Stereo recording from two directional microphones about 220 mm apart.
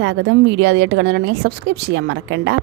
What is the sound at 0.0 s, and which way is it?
A woman's voice, 55° right (ahead or behind).